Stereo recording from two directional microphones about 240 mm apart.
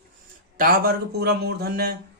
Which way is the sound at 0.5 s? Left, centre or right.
Right.